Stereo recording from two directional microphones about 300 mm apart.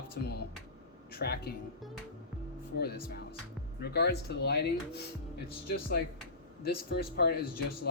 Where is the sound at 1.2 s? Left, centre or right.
Left.